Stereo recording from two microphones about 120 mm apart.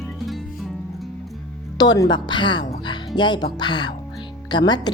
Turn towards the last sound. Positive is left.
turn(degrees=35)  # may be behind; listen again after turning